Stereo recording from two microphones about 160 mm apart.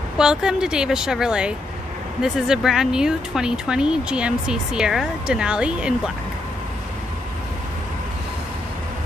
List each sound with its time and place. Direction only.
0.2 s speech: 5° right (ahead or behind)